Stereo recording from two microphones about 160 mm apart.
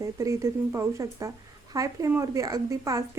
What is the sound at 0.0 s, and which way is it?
A woman's voice, 20° right (ahead or behind).